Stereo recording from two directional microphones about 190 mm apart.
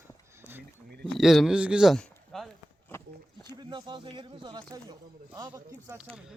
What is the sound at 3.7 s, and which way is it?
Speech, 25° right (ahead or behind).